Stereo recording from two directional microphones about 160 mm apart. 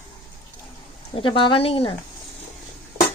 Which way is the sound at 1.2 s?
30° left (ahead or behind).